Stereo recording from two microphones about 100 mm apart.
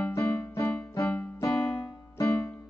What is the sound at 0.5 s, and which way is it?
Keyboard, 30° left (ahead or behind).